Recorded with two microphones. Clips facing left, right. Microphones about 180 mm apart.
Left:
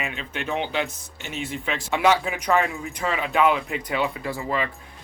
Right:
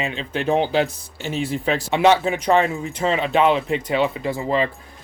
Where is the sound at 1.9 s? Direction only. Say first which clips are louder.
Right 4 dB; 25° right (ahead or behind).